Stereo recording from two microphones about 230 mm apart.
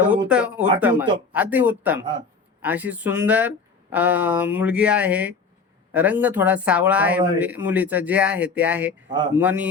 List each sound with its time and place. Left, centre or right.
0.3 s speech: centre
9.1 s speech: centre
9.4 s speech: centre